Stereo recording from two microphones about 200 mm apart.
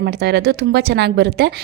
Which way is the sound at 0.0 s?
55° right (ahead or behind).